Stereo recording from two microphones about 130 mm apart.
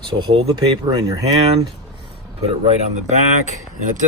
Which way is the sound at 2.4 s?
60° right (ahead or behind).